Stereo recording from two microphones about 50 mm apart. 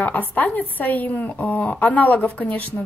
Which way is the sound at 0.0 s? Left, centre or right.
Left.